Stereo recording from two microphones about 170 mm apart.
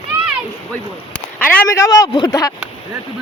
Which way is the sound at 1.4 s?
10° left (ahead or behind).